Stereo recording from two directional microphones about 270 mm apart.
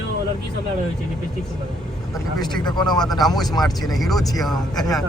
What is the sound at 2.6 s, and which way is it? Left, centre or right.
Speech, centre.